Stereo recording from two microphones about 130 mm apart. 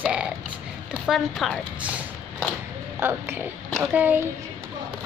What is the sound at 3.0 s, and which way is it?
Speech, 15° right (ahead or behind).